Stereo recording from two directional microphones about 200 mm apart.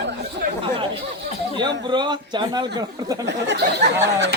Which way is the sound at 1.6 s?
20° right (ahead or behind).